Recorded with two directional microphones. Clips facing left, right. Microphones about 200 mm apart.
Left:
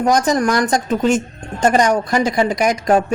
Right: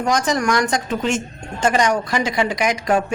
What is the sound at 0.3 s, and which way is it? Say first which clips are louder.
Speech: left 3 dB; 35° left (ahead or behind).